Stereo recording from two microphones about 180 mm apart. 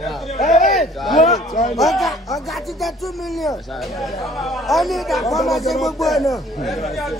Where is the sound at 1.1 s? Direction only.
40° left (ahead or behind).